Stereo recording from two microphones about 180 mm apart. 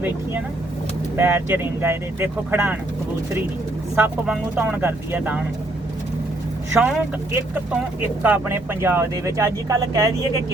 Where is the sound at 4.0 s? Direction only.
5° right (ahead or behind).